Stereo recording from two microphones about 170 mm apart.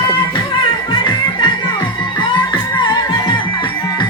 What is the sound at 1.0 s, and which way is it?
Music, 25° left (ahead or behind).